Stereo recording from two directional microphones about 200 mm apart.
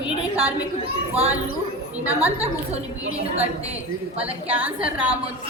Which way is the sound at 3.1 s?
30° right (ahead or behind).